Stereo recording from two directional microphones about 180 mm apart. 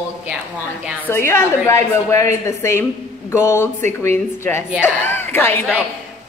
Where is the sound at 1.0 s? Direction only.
15° left (ahead or behind).